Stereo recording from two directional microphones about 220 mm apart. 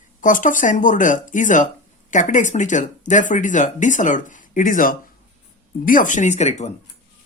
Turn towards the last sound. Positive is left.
turn(degrees=30)  # may be behind; listen again after turning